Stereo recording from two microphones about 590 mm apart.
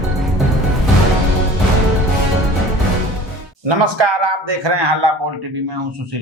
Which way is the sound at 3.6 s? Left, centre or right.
Right.